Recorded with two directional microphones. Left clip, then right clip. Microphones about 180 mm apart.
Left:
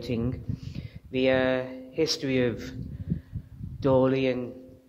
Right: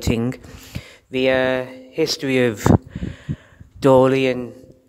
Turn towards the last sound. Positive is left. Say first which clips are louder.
# right 9 dB
turn(degrees=-40)  # may be behind; listen again after turning